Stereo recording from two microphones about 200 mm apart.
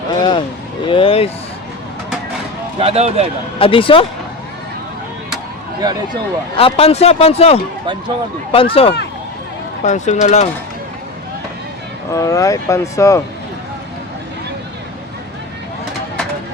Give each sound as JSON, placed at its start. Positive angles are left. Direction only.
{"t": 0.2, "sound": "a sound", "side_deg": 25}
{"t": 0.9, "sound": "vehicle", "side_deg": 25}
{"t": 2.7, "sound": "speech", "side_deg": -30}
{"t": 3.6, "sound": "a man's voice", "side_deg": 25}
{"t": 5.8, "sound": "speech", "side_deg": -20}
{"t": 6.6, "sound": "a man's voice", "side_deg": 30}
{"t": 12.1, "sound": "speech", "side_deg": 15}